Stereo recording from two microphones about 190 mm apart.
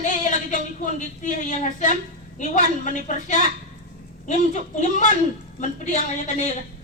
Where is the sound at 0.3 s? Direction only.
40° left (ahead or behind).